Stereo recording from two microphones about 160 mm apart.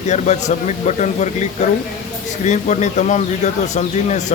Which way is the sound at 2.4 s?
50° left (ahead or behind).